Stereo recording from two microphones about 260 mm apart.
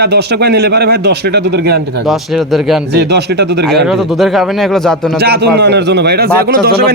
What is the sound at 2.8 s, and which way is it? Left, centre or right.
Speech, right.